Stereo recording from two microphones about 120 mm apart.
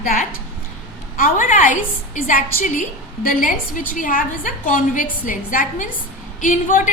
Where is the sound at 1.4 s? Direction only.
90° left.